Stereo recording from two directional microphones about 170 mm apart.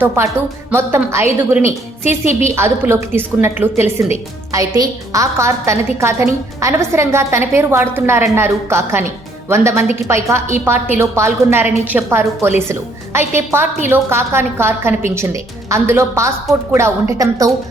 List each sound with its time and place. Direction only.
0.7 s a woman's voice: 15° right (ahead or behind)